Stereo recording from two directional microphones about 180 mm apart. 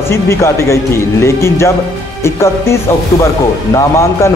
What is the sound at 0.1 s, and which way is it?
Speech, 15° left (ahead or behind).